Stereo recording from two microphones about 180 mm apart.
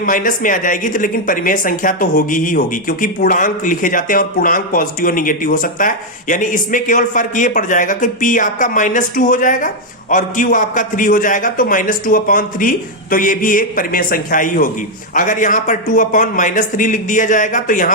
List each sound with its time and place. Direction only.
0.0 s a woman's voice: 50° left (ahead or behind)